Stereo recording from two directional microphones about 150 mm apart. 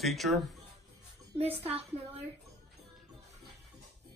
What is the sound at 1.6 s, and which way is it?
Speech, 40° right (ahead or behind).